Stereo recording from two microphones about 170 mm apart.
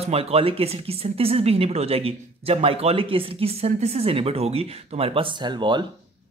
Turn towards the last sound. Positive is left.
turn(degrees=-25)  # may be behind; listen again after turning